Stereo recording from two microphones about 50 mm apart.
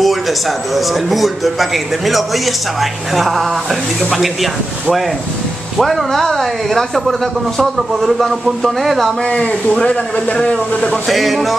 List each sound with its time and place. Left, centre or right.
0.0 s speech: centre
5.8 s speech: centre
9.2 s a man's voice: left
11.1 s speech: centre